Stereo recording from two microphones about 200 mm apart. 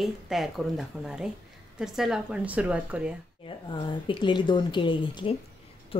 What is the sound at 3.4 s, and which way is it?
Speech, 25° left (ahead or behind).